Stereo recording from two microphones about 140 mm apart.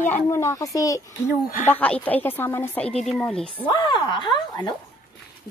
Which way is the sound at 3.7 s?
35° left (ahead or behind).